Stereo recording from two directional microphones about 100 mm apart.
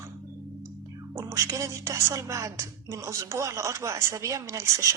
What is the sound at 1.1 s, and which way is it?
Speech, 30° right (ahead or behind).